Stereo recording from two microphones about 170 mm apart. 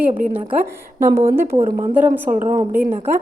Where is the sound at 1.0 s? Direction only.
15° right (ahead or behind).